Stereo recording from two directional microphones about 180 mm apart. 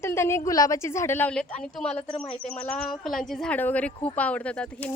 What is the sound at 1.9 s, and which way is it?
Speech, 35° left (ahead or behind).